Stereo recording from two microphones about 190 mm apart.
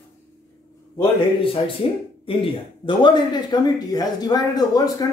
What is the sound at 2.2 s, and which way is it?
Speech, 30° left (ahead or behind).